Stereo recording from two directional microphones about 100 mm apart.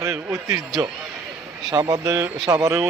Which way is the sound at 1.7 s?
40° right (ahead or behind).